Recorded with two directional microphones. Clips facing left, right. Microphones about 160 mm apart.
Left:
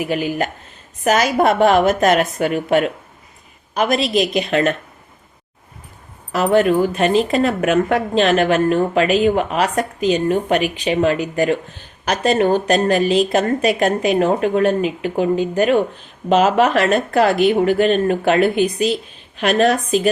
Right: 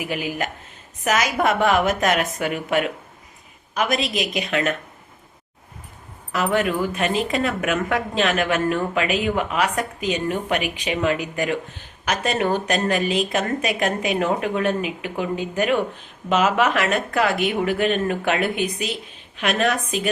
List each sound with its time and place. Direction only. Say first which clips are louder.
0.1 s speech: left 6 dB; 35° left (ahead or behind)
6.3 s speech: left 7 dB; 35° left (ahead or behind)